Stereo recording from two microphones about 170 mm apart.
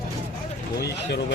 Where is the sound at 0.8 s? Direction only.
80° left.